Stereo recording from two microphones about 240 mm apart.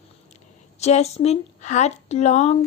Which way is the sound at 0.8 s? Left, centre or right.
Left.